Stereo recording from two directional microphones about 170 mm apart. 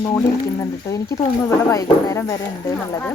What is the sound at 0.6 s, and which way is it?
Speech, 20° left (ahead or behind).